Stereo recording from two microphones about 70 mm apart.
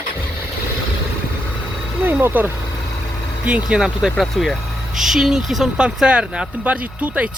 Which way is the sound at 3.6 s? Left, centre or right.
Centre.